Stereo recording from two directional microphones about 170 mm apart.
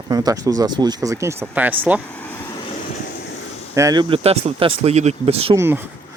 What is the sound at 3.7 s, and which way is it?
Speech, 20° right (ahead or behind).